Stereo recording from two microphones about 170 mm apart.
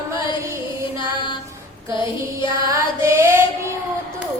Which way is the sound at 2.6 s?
15° right (ahead or behind).